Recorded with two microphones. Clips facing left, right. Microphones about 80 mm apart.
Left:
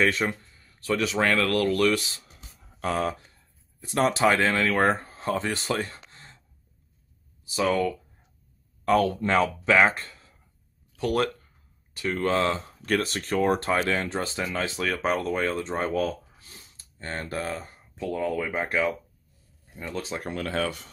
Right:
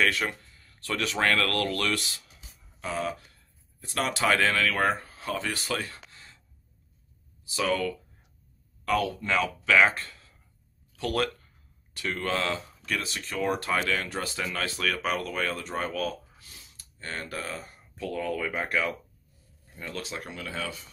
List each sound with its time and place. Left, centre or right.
0.0 s speech: left
2.8 s speech: left
3.1 s speech: left
7.5 s speech: left
8.8 s speech: left
9.7 s speech: left
12.8 s speech: left
15.0 s speech: left
18.0 s speech: left
20.0 s speech: left
20.2 s speech: left